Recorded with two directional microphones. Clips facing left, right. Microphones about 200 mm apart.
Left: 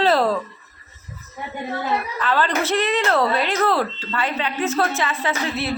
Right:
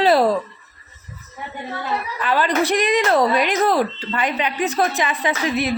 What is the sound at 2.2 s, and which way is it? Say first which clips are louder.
Speech: right 4 dB; 15° right (ahead or behind).